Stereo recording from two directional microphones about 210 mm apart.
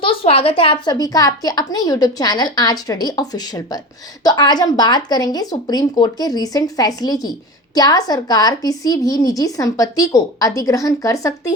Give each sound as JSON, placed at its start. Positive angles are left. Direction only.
{"t": 0.0, "sound": "a woman's voice", "side_deg": 25}